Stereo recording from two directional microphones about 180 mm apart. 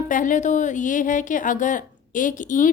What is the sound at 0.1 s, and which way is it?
Speech, 45° left (ahead or behind).